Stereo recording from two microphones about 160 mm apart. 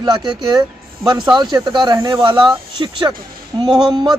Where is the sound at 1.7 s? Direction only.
25° right (ahead or behind).